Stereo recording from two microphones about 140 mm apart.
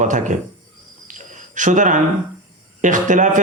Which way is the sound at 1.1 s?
65° right (ahead or behind).